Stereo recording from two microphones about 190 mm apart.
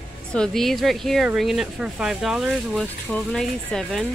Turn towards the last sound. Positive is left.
turn(degrees=5)  # may be behind; listen again after turning